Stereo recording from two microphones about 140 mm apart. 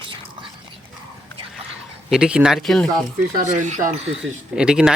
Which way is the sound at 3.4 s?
65° right (ahead or behind).